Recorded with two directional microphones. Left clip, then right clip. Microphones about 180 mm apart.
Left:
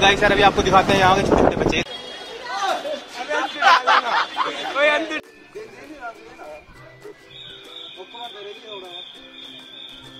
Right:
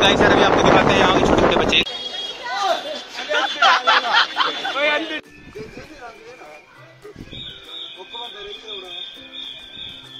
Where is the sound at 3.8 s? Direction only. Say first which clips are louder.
Right 2 dB; 5° left (ahead or behind).